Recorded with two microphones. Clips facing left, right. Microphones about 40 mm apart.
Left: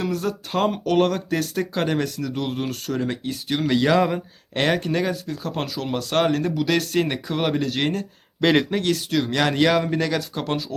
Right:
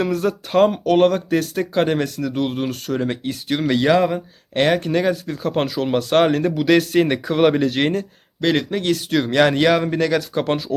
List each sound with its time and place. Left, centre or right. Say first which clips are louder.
0.1 s speech: right 6 dB; centre
7.7 s speech: right 4 dB; centre
8.4 s speech: even; centre
8.8 s speech: right 3 dB; centre
10.3 s speech: right 5 dB; right